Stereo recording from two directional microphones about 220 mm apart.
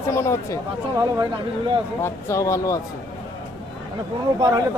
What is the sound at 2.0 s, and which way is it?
Speech, 10° left (ahead or behind).